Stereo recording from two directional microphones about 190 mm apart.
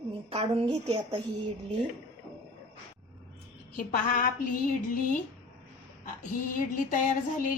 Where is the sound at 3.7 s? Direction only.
45° left (ahead or behind).